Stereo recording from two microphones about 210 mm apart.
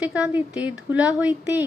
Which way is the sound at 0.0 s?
5° right (ahead or behind).